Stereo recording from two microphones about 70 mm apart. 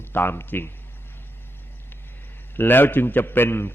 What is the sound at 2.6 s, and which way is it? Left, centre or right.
A man's voice, left.